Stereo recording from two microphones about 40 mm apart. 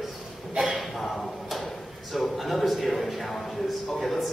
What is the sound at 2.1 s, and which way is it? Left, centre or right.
A man's voice, centre.